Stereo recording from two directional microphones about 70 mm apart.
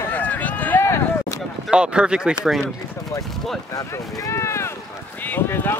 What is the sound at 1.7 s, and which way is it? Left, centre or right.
Speech, centre.